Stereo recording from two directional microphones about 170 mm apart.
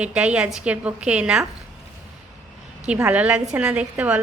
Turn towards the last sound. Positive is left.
turn(degrees=-5)  # may be behind; listen again after turning